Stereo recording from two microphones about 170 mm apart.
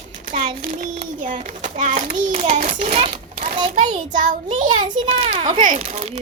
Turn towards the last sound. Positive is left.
turn(degrees=-35)  # may be behind; listen again after turning